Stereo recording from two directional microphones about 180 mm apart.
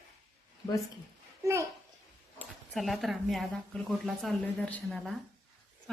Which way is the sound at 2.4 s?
Centre (ahead or behind).